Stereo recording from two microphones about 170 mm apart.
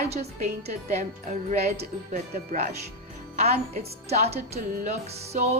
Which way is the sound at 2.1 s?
40° right (ahead or behind).